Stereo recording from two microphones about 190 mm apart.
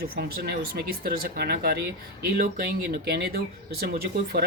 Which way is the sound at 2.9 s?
60° right (ahead or behind).